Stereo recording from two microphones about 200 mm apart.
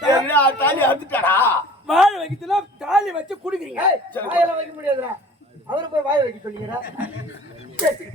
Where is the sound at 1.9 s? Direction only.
Centre (ahead or behind).